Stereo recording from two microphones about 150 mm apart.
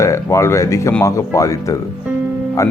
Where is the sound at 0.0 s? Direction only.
20° left (ahead or behind).